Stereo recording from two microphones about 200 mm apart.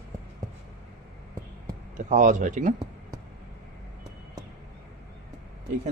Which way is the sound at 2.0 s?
40° right (ahead or behind).